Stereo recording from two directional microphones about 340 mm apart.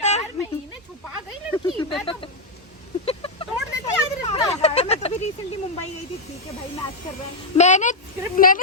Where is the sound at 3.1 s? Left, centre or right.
Centre.